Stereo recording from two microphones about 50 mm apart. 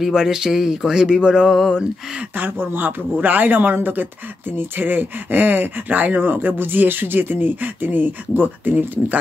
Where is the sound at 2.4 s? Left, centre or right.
Right.